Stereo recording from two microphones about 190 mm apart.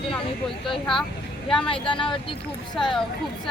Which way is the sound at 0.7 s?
Centre (ahead or behind).